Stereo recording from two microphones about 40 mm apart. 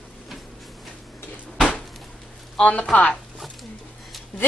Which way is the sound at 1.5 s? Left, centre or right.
Left.